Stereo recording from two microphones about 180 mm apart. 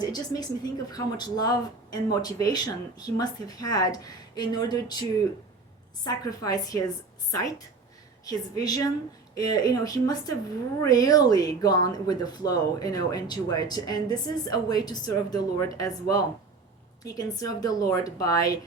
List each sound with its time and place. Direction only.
0.0 s speech: 20° left (ahead or behind)
6.1 s speech: 20° left (ahead or behind)